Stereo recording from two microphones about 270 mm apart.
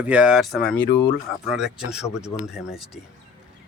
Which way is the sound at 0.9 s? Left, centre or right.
Left.